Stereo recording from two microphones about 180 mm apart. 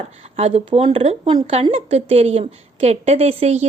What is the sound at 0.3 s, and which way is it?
Speech, 35° right (ahead or behind).